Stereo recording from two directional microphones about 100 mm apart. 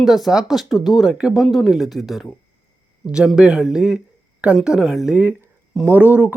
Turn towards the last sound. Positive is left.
turn(degrees=-15)  # may be behind; listen again after turning